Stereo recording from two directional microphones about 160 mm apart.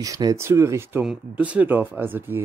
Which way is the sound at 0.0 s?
20° right (ahead or behind).